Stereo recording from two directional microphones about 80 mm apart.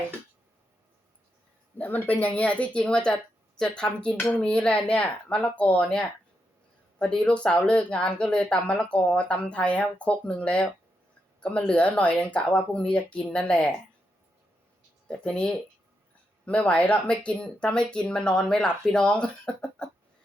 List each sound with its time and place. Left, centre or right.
1.8 s speech: centre
15.0 s speech: centre
16.5 s speech: centre